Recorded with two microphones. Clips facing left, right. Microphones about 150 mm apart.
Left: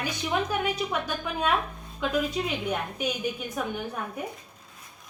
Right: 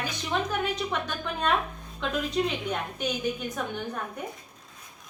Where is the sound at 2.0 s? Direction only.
5° left (ahead or behind).